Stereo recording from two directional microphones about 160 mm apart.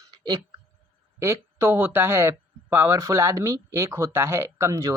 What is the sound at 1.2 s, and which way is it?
Speech, 15° right (ahead or behind).